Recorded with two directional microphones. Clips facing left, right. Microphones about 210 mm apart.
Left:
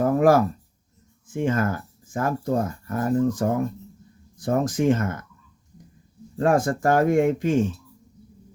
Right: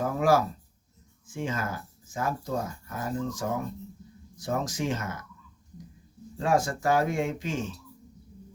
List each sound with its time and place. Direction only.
0.0 s a sound: 55° left (ahead or behind)
1.3 s speech: 55° left (ahead or behind)
6.3 s speech: 55° left (ahead or behind)